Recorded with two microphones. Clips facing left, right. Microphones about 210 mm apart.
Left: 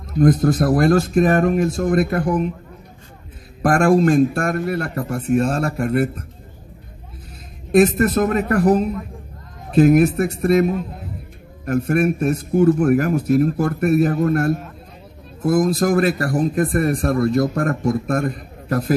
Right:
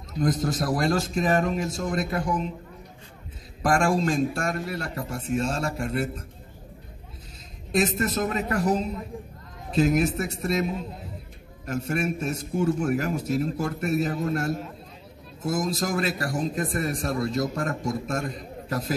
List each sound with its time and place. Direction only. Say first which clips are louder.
0.1 s a man's voice: left 10 dB; 60° left (ahead or behind)
3.6 s a man's voice: left 8 dB; 60° left (ahead or behind)
7.7 s a man's voice: left 10 dB; 60° left (ahead or behind)